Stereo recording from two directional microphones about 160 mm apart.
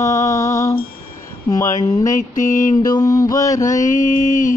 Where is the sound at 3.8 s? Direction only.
50° left (ahead or behind).